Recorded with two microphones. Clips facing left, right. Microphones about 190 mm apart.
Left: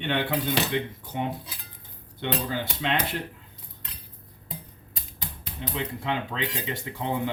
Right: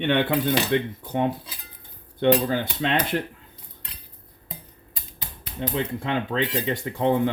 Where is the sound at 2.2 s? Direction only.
50° right (ahead or behind).